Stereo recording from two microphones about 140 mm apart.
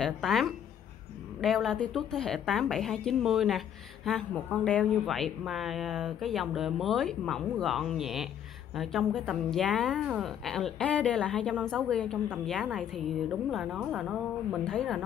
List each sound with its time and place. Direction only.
0.0 s speech: centre (ahead or behind)